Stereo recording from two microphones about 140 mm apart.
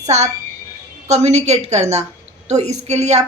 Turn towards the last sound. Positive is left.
turn(degrees=-50)  # may be behind; listen again after turning